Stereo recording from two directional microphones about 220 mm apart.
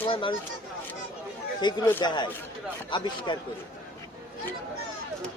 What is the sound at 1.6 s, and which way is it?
Speech, 20° left (ahead or behind).